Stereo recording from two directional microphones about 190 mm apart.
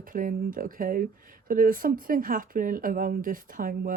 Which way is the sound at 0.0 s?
45° right (ahead or behind).